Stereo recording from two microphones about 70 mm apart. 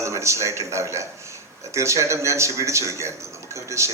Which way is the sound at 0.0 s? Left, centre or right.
Right.